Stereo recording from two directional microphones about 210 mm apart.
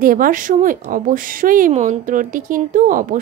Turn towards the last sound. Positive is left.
turn(degrees=-40)  # may be behind; listen again after turning